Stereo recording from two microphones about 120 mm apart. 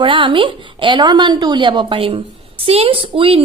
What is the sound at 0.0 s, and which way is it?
A woman's voice, 45° right (ahead or behind).